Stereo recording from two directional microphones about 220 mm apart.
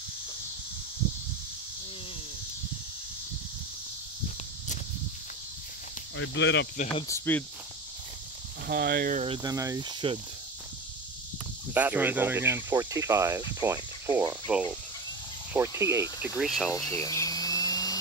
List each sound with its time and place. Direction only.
6.1 s speech: 55° left (ahead or behind)
7.1 s speech: 10° left (ahead or behind)
8.6 s speech: 45° right (ahead or behind)
9.2 s speech: 20° right (ahead or behind)
11.7 s speech: 10° right (ahead or behind)
16.7 s a sound: 15° left (ahead or behind)